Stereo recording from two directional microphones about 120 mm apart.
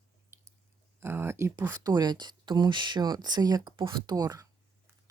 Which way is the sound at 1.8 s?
35° right (ahead or behind).